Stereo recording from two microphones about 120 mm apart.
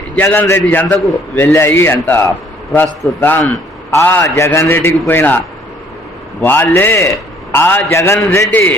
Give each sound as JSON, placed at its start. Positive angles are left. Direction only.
{"t": 0.2, "sound": "a man's voice", "side_deg": 20}
{"t": 6.4, "sound": "a man's voice", "side_deg": 15}